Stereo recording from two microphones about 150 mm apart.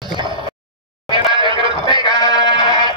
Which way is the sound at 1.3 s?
35° right (ahead or behind).